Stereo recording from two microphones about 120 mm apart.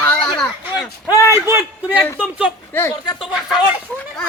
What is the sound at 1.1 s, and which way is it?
Speech, 20° right (ahead or behind).